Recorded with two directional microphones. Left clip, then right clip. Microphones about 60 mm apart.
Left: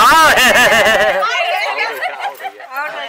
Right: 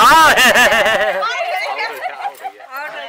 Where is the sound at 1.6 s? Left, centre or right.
Right.